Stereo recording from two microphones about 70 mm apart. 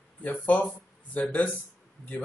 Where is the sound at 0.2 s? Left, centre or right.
Left.